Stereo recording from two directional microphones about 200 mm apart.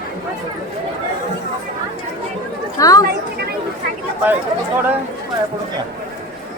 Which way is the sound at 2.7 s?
15° left (ahead or behind).